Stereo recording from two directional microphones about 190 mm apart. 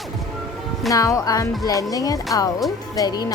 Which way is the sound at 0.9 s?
20° left (ahead or behind).